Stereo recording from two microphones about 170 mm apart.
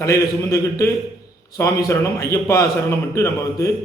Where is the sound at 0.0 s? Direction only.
15° left (ahead or behind).